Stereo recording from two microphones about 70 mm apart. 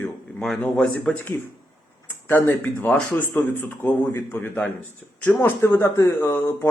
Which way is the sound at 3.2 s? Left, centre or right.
Left.